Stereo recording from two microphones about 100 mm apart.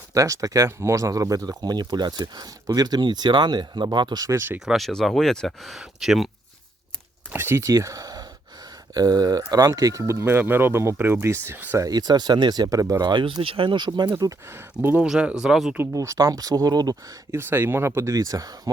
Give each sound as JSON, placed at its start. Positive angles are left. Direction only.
{"t": 0.1, "sound": "speech", "side_deg": -35}
{"t": 4.4, "sound": "speech", "side_deg": -20}
{"t": 4.6, "sound": "speech", "side_deg": 0}
{"t": 7.3, "sound": "speech", "side_deg": -25}
{"t": 11.8, "sound": "speech", "side_deg": -40}
{"t": 13.1, "sound": "speech", "side_deg": -50}
{"t": 14.5, "sound": "speech", "side_deg": -25}
{"t": 15.0, "sound": "speech", "side_deg": -10}
{"t": 15.9, "sound": "speech", "side_deg": -35}
{"t": 17.3, "sound": "speech", "side_deg": -25}